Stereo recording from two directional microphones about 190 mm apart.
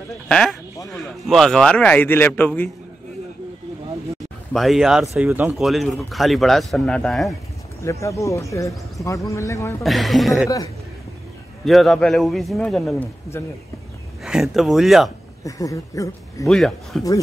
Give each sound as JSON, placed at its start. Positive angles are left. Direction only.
{"t": 0.3, "sound": "a man's voice", "side_deg": 5}
{"t": 4.5, "sound": "speech", "side_deg": 0}
{"t": 7.8, "sound": "a man's voice", "side_deg": 15}
{"t": 9.8, "sound": "speech", "side_deg": 0}
{"t": 11.6, "sound": "speech", "side_deg": 0}
{"t": 14.2, "sound": "speech", "side_deg": 0}
{"t": 15.4, "sound": "a man's voice", "side_deg": 15}
{"t": 16.4, "sound": "speech", "side_deg": 0}